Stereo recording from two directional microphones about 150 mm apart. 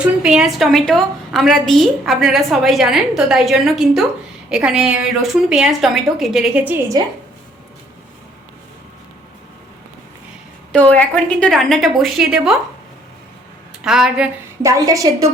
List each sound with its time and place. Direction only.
0.2 s a woman's voice: 5° right (ahead or behind)
7.0 s a woman's voice: 25° right (ahead or behind)
10.7 s a woman's voice: 10° left (ahead or behind)
13.8 s a woman's voice: 5° right (ahead or behind)
14.6 s a woman's voice: 25° right (ahead or behind)